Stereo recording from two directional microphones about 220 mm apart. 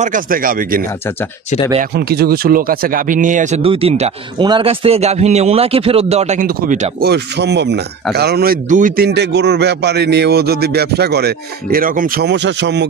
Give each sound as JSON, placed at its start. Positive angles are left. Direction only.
{"t": 0.0, "sound": "speech", "side_deg": -40}
{"t": 2.0, "sound": "a man's voice", "side_deg": -45}